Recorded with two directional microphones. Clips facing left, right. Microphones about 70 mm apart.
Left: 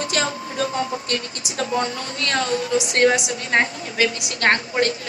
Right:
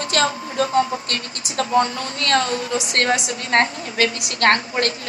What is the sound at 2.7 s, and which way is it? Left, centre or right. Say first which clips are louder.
Speech: left 4 dB; centre.